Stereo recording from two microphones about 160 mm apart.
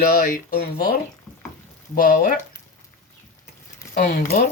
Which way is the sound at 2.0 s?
60° left (ahead or behind).